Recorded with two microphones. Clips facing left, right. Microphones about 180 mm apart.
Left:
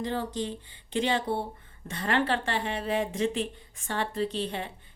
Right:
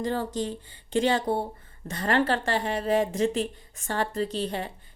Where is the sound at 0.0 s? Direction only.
45° right (ahead or behind).